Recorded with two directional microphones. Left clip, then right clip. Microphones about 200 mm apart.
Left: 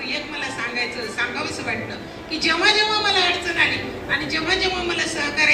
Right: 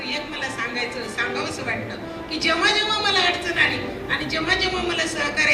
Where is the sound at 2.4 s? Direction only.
45° right (ahead or behind).